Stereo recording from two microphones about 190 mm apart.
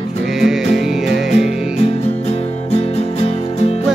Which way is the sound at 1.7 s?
35° left (ahead or behind).